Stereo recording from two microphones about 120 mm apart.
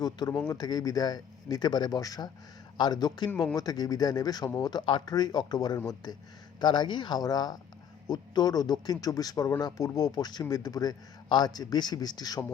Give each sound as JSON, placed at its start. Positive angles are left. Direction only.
{"t": 0.0, "sound": "a man's voice", "side_deg": 30}